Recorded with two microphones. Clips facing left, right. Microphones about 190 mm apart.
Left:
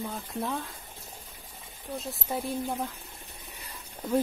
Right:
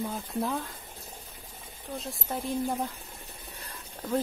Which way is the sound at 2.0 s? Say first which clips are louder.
Left 2 dB; 5° left (ahead or behind).